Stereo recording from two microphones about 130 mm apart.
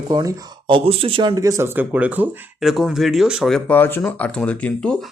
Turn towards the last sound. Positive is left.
turn(degrees=10)  # may be behind; listen again after turning